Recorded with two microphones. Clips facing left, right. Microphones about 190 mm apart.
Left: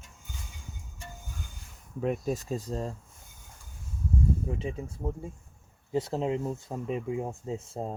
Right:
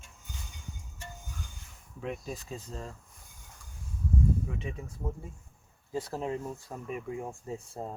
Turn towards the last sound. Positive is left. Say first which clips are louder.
# left 4 dB
turn(degrees=25)  # may be behind; listen again after turning